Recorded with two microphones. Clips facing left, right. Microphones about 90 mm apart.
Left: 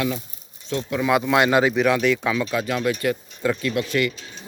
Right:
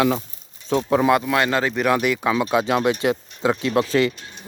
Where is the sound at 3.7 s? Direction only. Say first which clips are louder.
Right 4 dB; 35° right (ahead or behind).